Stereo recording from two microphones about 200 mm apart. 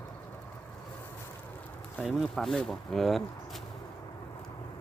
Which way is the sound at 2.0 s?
Centre (ahead or behind).